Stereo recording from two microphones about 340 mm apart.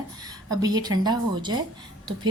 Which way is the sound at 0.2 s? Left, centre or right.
Centre.